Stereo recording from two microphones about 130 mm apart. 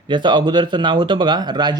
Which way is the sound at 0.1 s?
35° right (ahead or behind).